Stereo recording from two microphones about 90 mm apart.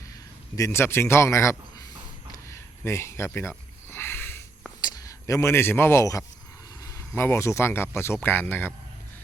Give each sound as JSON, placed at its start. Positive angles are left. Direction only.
{"t": 0.5, "sound": "speech", "side_deg": 30}
{"t": 2.3, "sound": "a sound", "side_deg": 35}
{"t": 3.8, "sound": "sniff", "side_deg": 25}
{"t": 4.8, "sound": "speech", "side_deg": 40}
{"t": 7.1, "sound": "speech", "side_deg": 25}